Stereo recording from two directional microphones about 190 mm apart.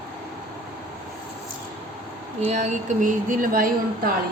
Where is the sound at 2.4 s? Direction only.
40° right (ahead or behind).